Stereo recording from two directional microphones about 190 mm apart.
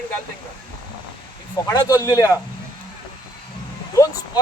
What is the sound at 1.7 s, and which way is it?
Speech, 20° left (ahead or behind).